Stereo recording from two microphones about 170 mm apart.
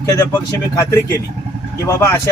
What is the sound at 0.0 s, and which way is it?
Speech, 20° left (ahead or behind).